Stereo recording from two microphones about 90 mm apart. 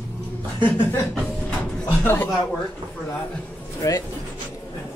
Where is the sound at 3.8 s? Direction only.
40° left (ahead or behind).